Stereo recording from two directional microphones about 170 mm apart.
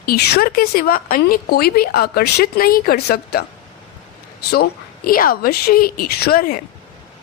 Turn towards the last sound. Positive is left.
turn(degrees=60)  # may be behind; listen again after turning